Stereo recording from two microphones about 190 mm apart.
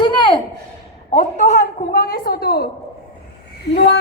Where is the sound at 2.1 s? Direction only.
55° left (ahead or behind).